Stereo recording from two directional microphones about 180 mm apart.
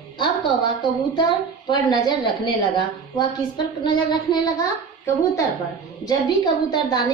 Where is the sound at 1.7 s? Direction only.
25° left (ahead or behind).